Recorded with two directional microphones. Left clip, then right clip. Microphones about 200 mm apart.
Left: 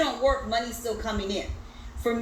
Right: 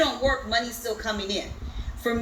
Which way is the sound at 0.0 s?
20° right (ahead or behind).